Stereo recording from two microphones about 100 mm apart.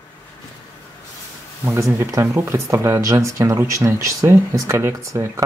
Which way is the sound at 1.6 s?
25° right (ahead or behind).